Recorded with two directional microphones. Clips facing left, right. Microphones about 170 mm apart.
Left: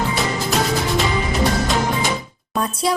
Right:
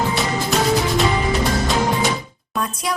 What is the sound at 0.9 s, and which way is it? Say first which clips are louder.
Music: right 1 dB; centre (ahead or behind).